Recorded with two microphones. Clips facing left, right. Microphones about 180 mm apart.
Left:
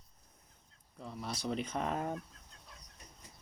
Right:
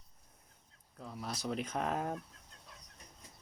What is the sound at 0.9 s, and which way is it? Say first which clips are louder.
Speech: left 1 dB; centre (ahead or behind).